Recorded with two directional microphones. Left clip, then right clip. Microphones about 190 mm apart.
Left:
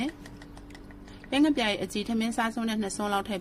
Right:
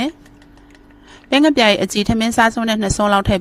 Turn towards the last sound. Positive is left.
turn(degrees=-45)  # may be behind; listen again after turning